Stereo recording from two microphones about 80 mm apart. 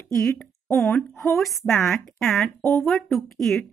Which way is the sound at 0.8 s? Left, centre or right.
Left.